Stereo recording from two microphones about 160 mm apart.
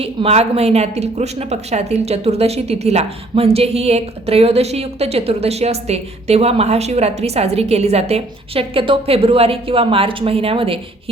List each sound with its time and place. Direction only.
0.0 s speech: 40° right (ahead or behind)